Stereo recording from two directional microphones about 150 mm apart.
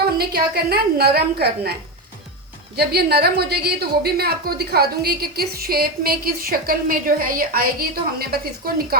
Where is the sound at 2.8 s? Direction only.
90° right.